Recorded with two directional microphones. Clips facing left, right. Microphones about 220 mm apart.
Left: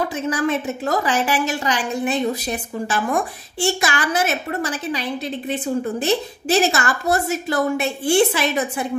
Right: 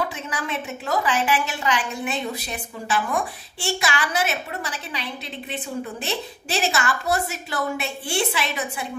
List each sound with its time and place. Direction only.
0.3 s a woman's voice: 45° left (ahead or behind)
6.0 s a woman's voice: 45° left (ahead or behind)